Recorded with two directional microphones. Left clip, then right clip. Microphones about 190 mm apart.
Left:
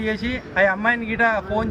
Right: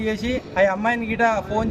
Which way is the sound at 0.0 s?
15° right (ahead or behind).